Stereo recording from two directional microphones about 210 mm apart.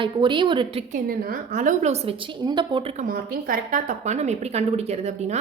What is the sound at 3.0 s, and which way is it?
A woman's voice, 45° right (ahead or behind).